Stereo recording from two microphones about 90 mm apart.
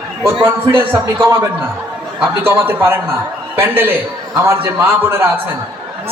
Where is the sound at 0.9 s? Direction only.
25° right (ahead or behind).